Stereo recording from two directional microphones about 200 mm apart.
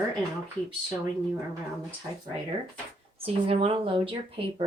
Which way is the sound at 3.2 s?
30° right (ahead or behind).